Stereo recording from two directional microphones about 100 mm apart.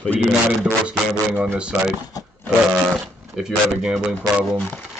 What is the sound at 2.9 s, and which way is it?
Speech, 5° right (ahead or behind).